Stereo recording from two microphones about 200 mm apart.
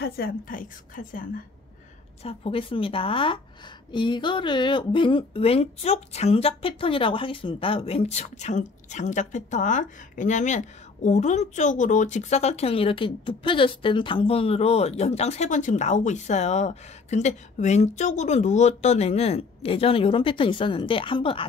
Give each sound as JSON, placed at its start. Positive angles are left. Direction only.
{"t": 0.0, "sound": "a woman's voice", "side_deg": 50}
{"t": 2.2, "sound": "a woman's voice", "side_deg": 25}